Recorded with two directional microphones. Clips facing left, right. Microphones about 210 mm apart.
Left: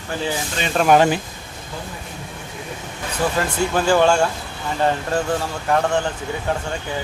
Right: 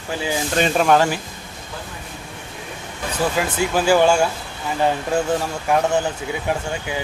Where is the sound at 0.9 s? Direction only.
20° left (ahead or behind).